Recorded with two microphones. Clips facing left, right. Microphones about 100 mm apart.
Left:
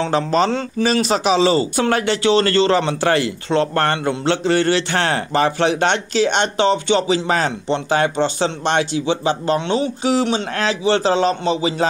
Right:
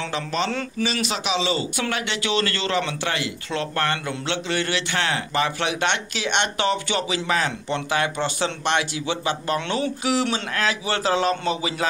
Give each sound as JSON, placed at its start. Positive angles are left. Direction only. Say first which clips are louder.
{"t": 0.0, "sound": "a man's voice", "louder": "left 9 dB", "side_deg": 40}
{"t": 0.8, "sound": "a man's voice", "louder": "left 10 dB", "side_deg": 40}